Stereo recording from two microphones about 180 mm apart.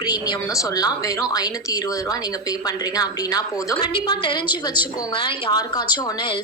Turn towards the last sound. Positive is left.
turn(degrees=25)  # may be behind; listen again after turning